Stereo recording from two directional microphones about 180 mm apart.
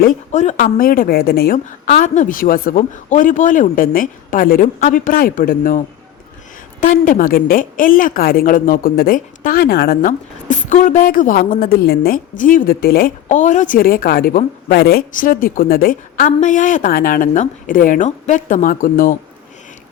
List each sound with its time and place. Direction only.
0.0 s a woman's voice: 45° left (ahead or behind)